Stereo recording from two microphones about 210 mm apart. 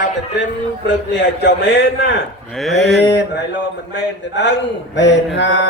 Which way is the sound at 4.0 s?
55° left (ahead or behind).